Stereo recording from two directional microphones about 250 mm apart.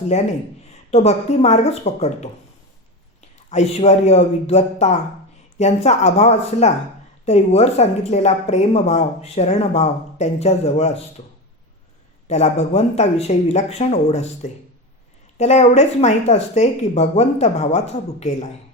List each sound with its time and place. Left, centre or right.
0.1 s a man's voice: left
12.3 s speech: left